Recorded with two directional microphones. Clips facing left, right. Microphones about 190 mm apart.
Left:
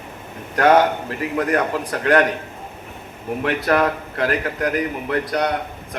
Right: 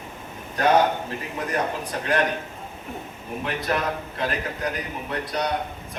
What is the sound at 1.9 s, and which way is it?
Speech, 75° left (ahead or behind).